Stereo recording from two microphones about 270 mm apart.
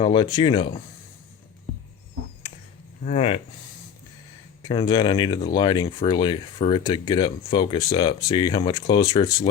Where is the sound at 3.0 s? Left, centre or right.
Left.